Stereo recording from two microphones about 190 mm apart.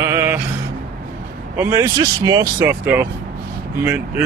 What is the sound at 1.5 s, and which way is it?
Speech, 10° right (ahead or behind).